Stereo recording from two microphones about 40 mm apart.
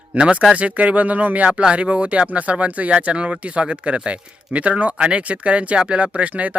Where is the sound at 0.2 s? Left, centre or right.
Right.